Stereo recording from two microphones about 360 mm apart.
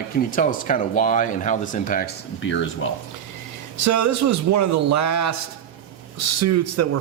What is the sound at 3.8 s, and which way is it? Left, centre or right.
A man's voice, right.